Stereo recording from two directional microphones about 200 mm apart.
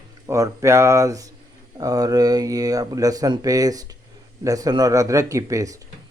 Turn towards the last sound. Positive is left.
turn(degrees=-15)  # may be behind; listen again after turning